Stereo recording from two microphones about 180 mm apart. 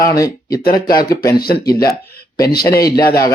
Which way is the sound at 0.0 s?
20° left (ahead or behind).